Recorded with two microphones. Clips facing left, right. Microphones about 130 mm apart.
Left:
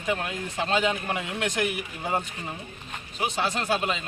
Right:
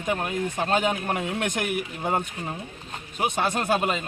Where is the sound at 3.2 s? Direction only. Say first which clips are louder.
Right 3 dB; 50° right (ahead or behind).